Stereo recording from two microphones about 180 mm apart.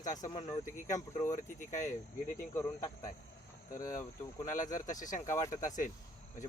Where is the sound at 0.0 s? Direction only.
20° left (ahead or behind).